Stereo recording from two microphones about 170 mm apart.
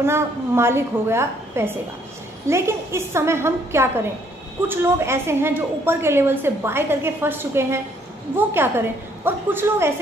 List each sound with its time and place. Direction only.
0.0 s a woman's voice: 15° right (ahead or behind)